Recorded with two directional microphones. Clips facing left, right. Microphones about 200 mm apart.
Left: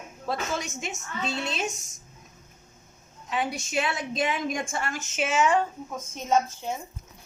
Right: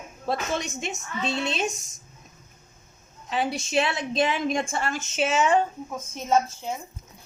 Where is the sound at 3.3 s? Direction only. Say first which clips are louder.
Right 3 dB; 30° right (ahead or behind).